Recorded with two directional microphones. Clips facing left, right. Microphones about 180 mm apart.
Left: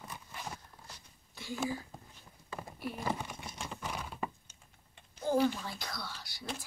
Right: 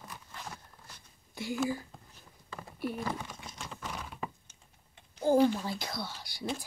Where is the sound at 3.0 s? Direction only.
10° left (ahead or behind).